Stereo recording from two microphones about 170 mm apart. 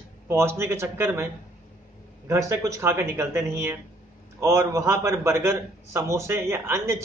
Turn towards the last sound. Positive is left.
turn(degrees=-15)  # may be behind; listen again after turning